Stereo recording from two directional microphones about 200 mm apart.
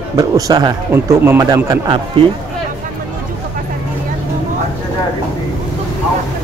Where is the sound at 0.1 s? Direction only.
15° right (ahead or behind).